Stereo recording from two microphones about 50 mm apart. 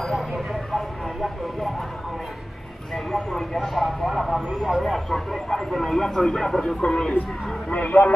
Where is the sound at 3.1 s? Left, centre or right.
Centre.